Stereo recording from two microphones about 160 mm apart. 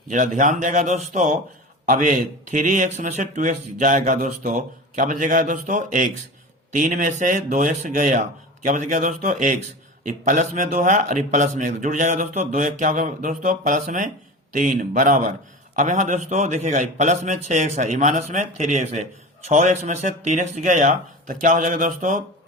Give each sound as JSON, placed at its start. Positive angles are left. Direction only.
{"t": 0.1, "sound": "a man's voice", "side_deg": -50}